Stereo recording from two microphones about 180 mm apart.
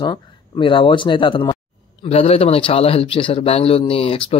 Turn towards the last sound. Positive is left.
turn(degrees=30)  # may be behind; listen again after turning